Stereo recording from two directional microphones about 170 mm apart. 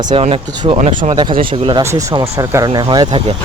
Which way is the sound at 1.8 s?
20° right (ahead or behind).